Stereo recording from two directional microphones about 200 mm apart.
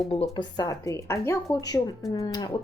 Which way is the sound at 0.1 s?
25° left (ahead or behind).